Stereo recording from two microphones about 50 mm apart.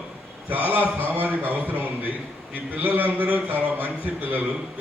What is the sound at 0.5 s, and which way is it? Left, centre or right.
A man's voice, right.